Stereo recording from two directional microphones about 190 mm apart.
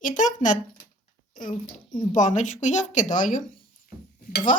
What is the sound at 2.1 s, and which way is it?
Dishes, 40° left (ahead or behind).